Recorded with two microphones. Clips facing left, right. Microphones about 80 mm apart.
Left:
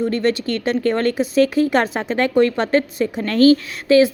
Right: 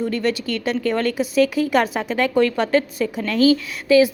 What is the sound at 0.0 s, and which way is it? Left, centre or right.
A woman's voice, left.